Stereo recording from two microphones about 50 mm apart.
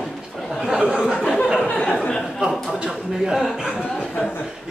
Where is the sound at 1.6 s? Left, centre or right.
Left.